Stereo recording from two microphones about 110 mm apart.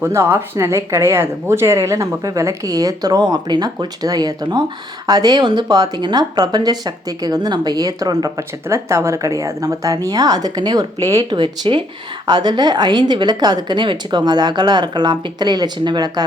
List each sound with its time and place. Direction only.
0.0 s speech: 25° right (ahead or behind)
11.3 s speech: 45° right (ahead or behind)